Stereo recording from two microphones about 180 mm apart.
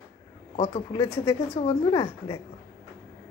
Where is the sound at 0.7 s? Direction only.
20° left (ahead or behind).